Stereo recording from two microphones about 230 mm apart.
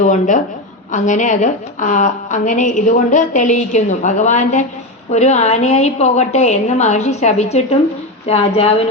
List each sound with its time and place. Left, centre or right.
0.0 s a woman's voice: left